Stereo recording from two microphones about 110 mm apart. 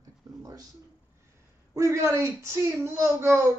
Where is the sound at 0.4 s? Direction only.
30° right (ahead or behind).